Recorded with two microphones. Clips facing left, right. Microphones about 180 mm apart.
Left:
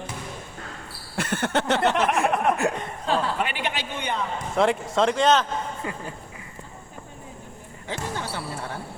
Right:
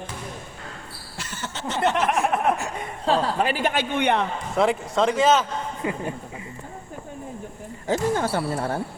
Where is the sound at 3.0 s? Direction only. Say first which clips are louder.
Right 4 dB; 35° right (ahead or behind).